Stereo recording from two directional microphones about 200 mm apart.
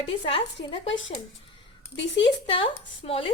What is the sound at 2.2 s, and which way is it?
A woman's voice, 25° left (ahead or behind).